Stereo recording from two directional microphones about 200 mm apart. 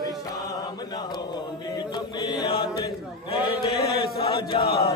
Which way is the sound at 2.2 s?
20° left (ahead or behind).